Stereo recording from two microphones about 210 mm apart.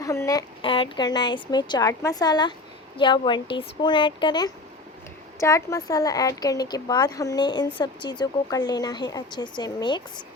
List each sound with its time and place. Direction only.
0.0 s a woman's voice: 15° left (ahead or behind)